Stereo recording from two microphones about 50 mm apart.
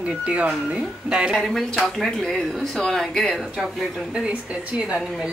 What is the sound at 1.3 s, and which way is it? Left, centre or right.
Speech, centre.